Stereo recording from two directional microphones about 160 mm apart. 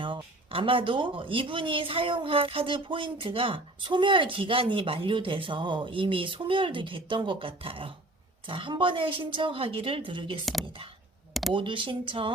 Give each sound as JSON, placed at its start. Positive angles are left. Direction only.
{"t": 0.0, "sound": "speech", "side_deg": -30}
{"t": 10.4, "sound": "speech", "side_deg": 0}
{"t": 11.5, "sound": "speech", "side_deg": -30}